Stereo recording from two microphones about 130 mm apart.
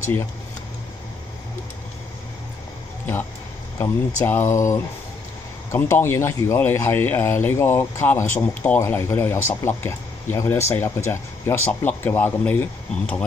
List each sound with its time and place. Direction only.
3.8 s speech: 15° left (ahead or behind)